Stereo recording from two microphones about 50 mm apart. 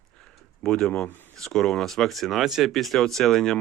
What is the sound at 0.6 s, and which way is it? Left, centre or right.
Speech, centre.